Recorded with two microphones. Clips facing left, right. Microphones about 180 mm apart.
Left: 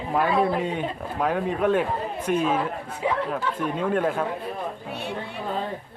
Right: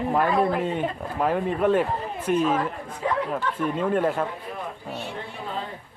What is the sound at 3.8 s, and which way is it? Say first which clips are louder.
Speech: even; 5° right (ahead or behind).